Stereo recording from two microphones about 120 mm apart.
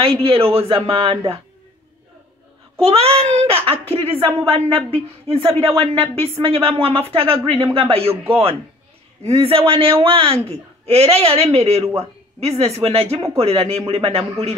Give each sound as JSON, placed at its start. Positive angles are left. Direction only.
{"t": 0.0, "sound": "speech", "side_deg": -50}
{"t": 2.8, "sound": "speech", "side_deg": -55}
{"t": 4.1, "sound": "speech", "side_deg": -20}
{"t": 4.5, "sound": "speech", "side_deg": -50}
{"t": 8.1, "sound": "speech", "side_deg": -15}
{"t": 9.2, "sound": "speech", "side_deg": -55}